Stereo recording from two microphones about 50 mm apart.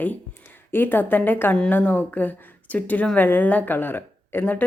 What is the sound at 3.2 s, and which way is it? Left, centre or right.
Speech, left.